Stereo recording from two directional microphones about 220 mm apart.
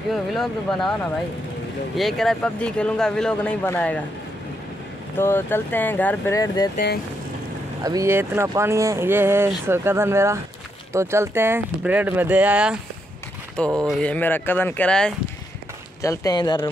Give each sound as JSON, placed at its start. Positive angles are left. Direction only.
{"t": 0.1, "sound": "speech", "side_deg": 0}
{"t": 2.0, "sound": "speech", "side_deg": 0}
{"t": 5.2, "sound": "speech", "side_deg": 10}
{"t": 7.8, "sound": "speech", "side_deg": -15}
{"t": 13.8, "sound": "speech", "side_deg": 5}
{"t": 16.0, "sound": "speech", "side_deg": 15}